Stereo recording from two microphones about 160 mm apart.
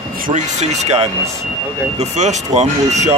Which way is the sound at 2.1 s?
45° right (ahead or behind).